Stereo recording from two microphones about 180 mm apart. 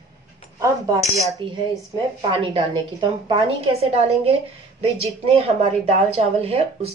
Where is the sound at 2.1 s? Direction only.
25° right (ahead or behind).